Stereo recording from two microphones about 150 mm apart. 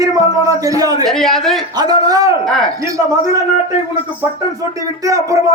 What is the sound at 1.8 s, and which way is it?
Speech, 25° right (ahead or behind).